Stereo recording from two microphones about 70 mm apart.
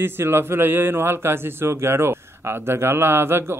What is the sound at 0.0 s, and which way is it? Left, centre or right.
A man's voice, right.